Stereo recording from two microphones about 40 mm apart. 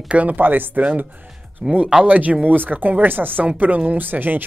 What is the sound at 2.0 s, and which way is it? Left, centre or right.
Speech, right.